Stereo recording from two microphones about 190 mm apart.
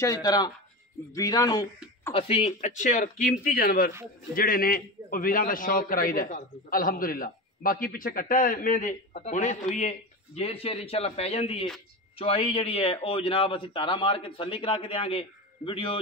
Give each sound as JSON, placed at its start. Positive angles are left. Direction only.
{"t": 0.0, "sound": "a man's voice", "side_deg": 20}
{"t": 2.1, "sound": "a man's voice", "side_deg": 30}